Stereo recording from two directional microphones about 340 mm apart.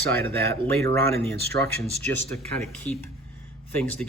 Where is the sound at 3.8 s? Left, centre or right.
Centre.